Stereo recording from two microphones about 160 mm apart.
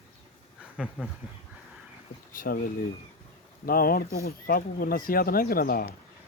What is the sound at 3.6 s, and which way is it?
Speech, 65° left (ahead or behind).